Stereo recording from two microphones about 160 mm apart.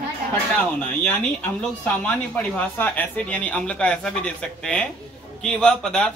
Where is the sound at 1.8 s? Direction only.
10° left (ahead or behind).